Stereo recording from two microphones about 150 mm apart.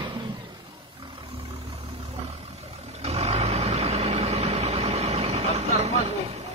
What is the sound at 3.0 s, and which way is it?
Vehicle, 45° right (ahead or behind).